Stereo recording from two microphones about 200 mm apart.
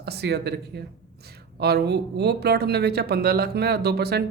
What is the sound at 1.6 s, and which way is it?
Speech, 55° right (ahead or behind).